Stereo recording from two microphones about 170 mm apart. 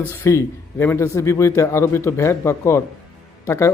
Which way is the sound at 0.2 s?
15° left (ahead or behind).